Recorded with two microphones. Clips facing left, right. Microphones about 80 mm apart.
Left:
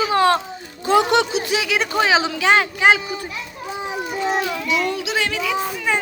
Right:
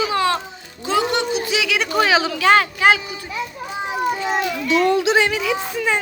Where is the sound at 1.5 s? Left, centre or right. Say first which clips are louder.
Even; left.